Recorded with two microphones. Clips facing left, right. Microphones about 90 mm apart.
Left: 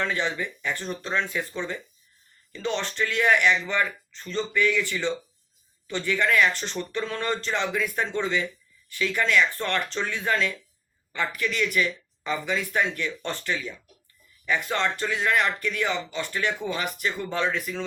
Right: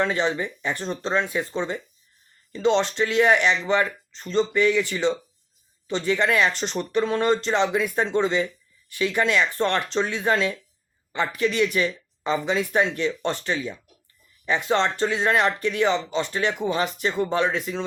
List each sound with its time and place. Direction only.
0.0 s speech: 20° right (ahead or behind)